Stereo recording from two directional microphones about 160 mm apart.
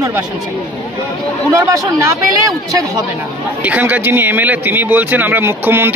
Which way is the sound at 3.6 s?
10° right (ahead or behind).